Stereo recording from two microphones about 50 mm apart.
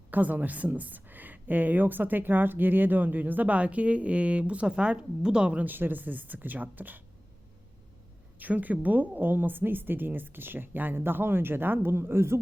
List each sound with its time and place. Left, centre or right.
0.1 s a woman's voice: right
5.6 s a woman's voice: right
8.4 s a woman's voice: right